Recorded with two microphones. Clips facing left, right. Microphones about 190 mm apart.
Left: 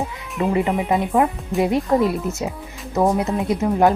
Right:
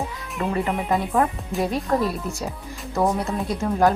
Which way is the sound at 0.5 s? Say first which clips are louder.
Left 3 dB; 20° left (ahead or behind).